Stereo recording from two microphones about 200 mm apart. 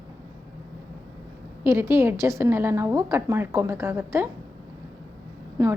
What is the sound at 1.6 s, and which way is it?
A woman's voice, 10° right (ahead or behind).